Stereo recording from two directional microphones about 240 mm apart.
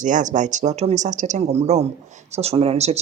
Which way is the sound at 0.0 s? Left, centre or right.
Right.